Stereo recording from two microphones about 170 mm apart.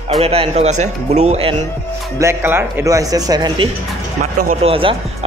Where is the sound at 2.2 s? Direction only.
15° right (ahead or behind).